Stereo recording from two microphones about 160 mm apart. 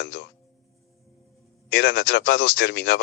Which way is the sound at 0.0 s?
90° left.